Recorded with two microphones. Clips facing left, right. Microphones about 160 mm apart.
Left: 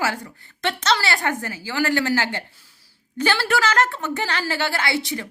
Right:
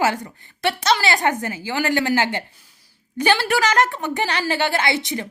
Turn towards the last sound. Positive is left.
turn(degrees=-20)  # may be behind; listen again after turning